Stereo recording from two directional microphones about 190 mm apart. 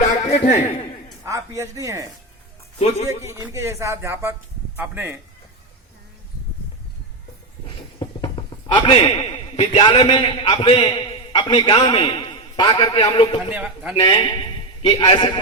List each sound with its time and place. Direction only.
0.3 s speech: 35° left (ahead or behind)
1.2 s speech: 15° right (ahead or behind)
3.1 s speech: 15° right (ahead or behind)
7.8 s a man's voice: 25° left (ahead or behind)
13.5 s speech: 5° right (ahead or behind)
14.0 s a man's voice: 25° left (ahead or behind)